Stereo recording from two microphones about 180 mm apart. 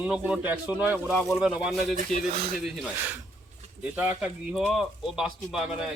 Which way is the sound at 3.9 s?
10° right (ahead or behind).